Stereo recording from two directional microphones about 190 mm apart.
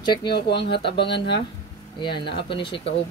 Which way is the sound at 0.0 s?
25° left (ahead or behind).